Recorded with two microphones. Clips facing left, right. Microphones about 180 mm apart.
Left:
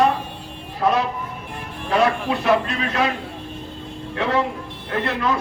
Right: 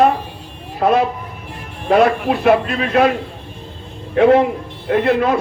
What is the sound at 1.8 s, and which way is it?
Speech, 55° right (ahead or behind).